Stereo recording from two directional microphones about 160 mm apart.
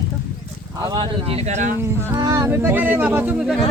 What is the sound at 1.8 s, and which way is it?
Speech, 15° right (ahead or behind).